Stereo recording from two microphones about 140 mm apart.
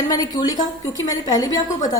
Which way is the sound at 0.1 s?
25° left (ahead or behind).